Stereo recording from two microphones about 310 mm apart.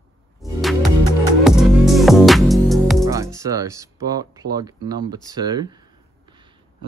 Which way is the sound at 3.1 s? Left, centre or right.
Centre.